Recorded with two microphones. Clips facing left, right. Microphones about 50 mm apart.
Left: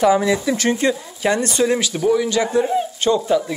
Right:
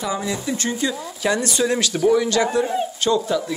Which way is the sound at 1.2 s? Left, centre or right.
Left.